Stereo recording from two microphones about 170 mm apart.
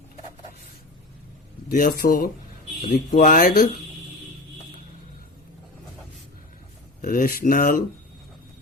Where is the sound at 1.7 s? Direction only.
60° left (ahead or behind).